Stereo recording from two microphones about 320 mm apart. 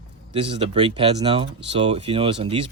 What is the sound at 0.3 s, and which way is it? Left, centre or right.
Speech, centre.